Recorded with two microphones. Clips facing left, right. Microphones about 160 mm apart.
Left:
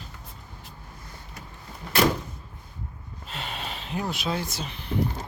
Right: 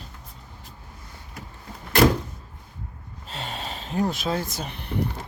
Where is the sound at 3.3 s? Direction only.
40° right (ahead or behind); by 5.0 s 55° right (ahead or behind).